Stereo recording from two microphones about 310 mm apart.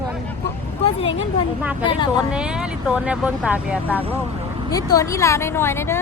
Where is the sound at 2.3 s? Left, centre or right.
Centre.